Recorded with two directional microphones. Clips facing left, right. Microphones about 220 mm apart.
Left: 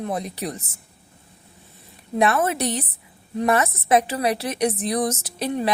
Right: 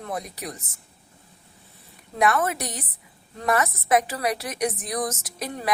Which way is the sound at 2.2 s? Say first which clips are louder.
Left 3 dB; 25° left (ahead or behind).